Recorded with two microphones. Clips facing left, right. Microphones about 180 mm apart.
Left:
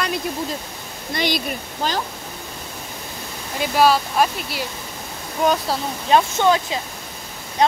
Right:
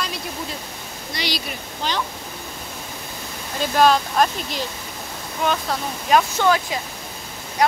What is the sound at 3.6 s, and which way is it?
Speech, 5° left (ahead or behind).